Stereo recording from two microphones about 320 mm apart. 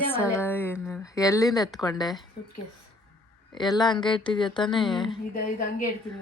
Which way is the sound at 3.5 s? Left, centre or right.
Centre.